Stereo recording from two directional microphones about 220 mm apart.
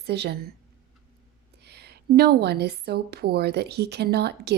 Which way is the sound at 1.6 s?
50° right (ahead or behind).